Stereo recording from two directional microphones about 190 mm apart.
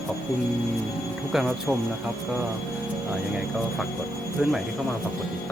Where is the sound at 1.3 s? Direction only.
Centre (ahead or behind).